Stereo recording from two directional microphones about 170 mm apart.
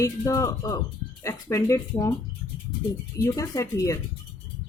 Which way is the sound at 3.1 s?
15° left (ahead or behind).